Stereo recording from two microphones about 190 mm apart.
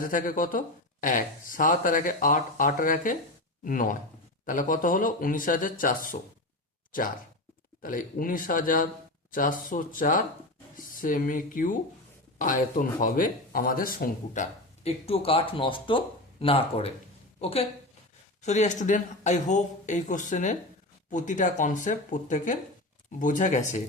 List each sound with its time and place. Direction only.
0.0 s speech: 45° left (ahead or behind)
7.8 s speech: 45° left (ahead or behind)
14.8 s speech: 30° left (ahead or behind)